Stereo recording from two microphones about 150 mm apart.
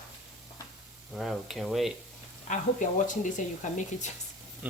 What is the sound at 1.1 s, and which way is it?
Speech, centre (ahead or behind).